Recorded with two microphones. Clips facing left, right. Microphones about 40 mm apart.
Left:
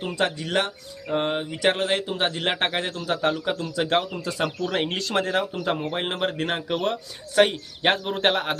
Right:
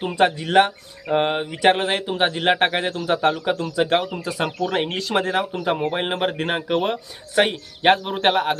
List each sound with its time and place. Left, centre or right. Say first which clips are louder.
0.0 s speech: right 6 dB; right; by 8.5 s centre